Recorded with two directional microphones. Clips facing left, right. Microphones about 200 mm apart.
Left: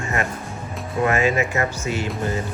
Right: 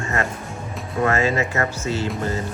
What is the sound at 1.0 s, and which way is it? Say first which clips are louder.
A man's voice: even; 15° left (ahead or behind).